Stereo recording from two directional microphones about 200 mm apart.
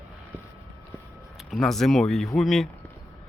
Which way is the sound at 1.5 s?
Centre (ahead or behind).